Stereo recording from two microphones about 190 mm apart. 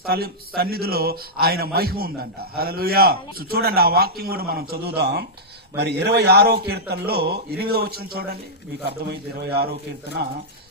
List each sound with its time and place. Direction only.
0.1 s a man's voice: 55° right (ahead or behind)